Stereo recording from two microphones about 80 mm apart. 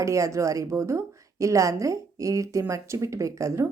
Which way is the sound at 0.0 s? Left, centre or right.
Right.